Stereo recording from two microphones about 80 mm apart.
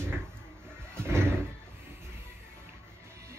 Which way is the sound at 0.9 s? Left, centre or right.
Right.